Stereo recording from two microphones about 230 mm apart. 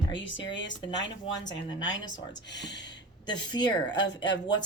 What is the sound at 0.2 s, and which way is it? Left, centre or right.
Speech, left.